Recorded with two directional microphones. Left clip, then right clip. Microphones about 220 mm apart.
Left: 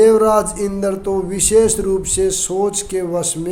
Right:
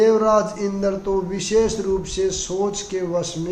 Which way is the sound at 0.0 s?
50° left (ahead or behind).